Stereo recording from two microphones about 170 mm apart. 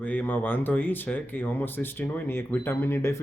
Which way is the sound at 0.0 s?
10° left (ahead or behind).